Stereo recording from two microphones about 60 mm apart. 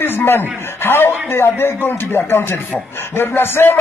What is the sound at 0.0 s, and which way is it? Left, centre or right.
A man's voice, left.